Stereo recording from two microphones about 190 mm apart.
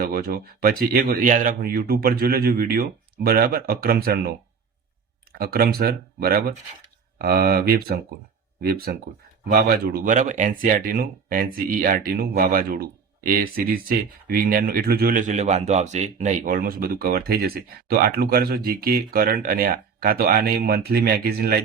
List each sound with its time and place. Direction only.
0.0 s speech: 55° right (ahead or behind)